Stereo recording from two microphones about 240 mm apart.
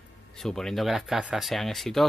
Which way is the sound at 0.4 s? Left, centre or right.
Centre.